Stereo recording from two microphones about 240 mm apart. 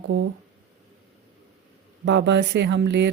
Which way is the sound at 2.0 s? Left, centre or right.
Right.